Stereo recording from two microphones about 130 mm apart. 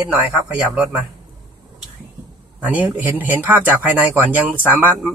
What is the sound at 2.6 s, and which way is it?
Speech, 15° right (ahead or behind).